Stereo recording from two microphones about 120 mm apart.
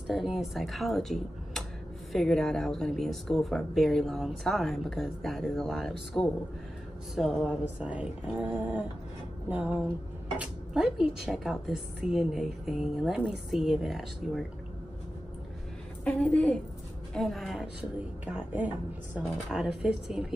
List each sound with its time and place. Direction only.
0.0 s speech: centre (ahead or behind)
16.0 s a woman's voice: 10° left (ahead or behind)
18.2 s speech: 15° right (ahead or behind)